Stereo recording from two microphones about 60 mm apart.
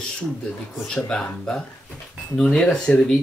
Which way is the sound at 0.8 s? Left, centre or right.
Centre.